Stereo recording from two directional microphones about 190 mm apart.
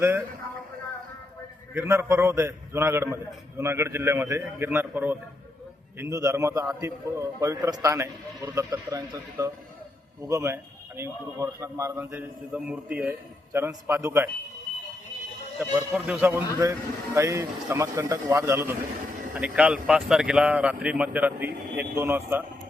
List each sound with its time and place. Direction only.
1.7 s a man's voice: 15° right (ahead or behind)
15.5 s a man's voice: 10° right (ahead or behind)